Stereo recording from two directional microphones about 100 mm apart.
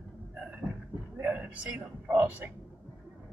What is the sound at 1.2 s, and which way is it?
Speech, 15° right (ahead or behind).